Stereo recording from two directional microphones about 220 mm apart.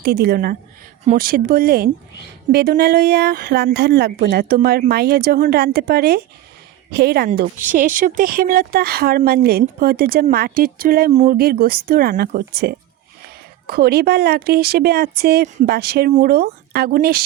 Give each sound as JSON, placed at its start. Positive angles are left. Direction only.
{"t": 0.0, "sound": "speech", "side_deg": -45}